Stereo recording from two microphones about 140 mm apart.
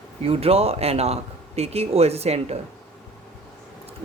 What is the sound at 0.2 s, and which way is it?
Speech, 45° right (ahead or behind).